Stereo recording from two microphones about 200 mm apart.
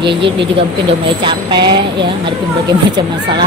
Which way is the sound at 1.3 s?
25° right (ahead or behind).